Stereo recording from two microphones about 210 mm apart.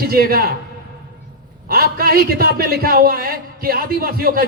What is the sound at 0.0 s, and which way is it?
Speech, 45° right (ahead or behind).